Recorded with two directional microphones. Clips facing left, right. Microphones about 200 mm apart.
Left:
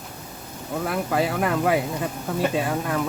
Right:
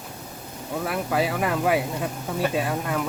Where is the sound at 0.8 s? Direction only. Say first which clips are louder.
Left 1 dB; centre (ahead or behind).